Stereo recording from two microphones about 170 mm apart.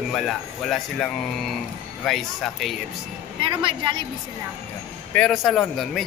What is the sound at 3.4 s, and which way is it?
Speech, 30° right (ahead or behind).